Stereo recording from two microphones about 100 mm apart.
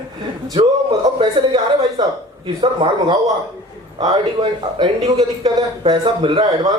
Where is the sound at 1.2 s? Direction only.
50° right (ahead or behind).